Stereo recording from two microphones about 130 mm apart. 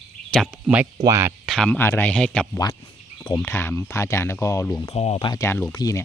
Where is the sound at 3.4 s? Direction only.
20° left (ahead or behind).